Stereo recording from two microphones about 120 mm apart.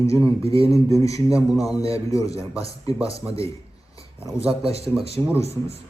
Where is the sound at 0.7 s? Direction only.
25° left (ahead or behind).